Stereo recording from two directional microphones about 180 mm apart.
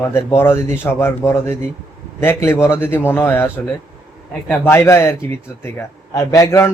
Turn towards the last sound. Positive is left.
turn(degrees=15)  # may be behind; listen again after turning